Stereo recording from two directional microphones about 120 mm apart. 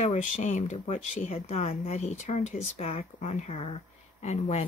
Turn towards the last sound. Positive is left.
turn(degrees=70)  # may be behind; listen again after turning